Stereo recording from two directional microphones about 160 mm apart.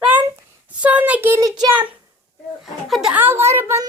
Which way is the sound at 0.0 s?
10° right (ahead or behind).